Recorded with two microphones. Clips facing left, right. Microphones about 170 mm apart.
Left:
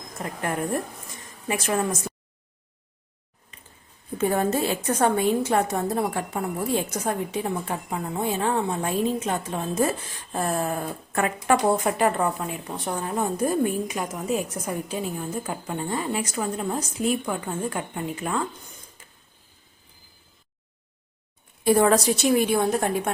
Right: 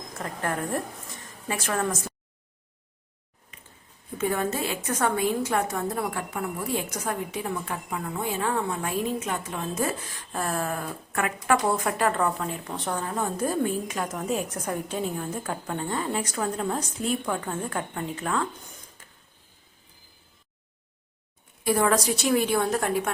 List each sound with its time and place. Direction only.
0.2 s a woman's voice: 20° left (ahead or behind)
4.2 s a woman's voice: 35° left (ahead or behind); by 18.4 s 10° left (ahead or behind)
21.6 s a woman's voice: 30° left (ahead or behind)